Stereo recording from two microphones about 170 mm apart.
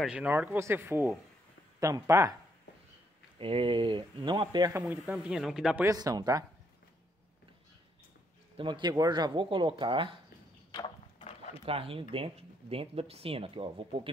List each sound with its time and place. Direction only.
0.0 s speech: 5° right (ahead or behind)
3.3 s speech: 30° right (ahead or behind)
4.8 s speech: 10° right (ahead or behind)
5.9 s speech: 20° right (ahead or behind)
8.5 s speech: 25° right (ahead or behind)
10.7 s a sound: 30° left (ahead or behind)
11.6 s speech: 35° right (ahead or behind)